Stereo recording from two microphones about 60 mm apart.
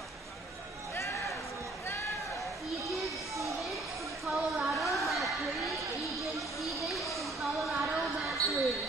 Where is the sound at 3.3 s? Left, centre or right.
Right.